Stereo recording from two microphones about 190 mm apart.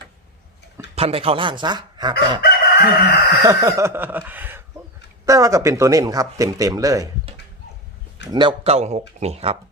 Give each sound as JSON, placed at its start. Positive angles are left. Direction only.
{"t": 0.9, "sound": "speech", "side_deg": -30}
{"t": 2.4, "sound": "crowing", "side_deg": 55}
{"t": 3.4, "sound": "speech", "side_deg": -15}
{"t": 8.3, "sound": "speech", "side_deg": -25}